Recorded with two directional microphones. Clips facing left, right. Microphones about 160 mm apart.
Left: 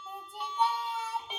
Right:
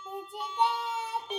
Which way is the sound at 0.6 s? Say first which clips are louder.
Right 2 dB; 20° right (ahead or behind).